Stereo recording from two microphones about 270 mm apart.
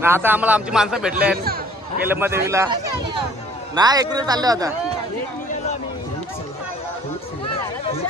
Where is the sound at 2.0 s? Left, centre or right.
Centre.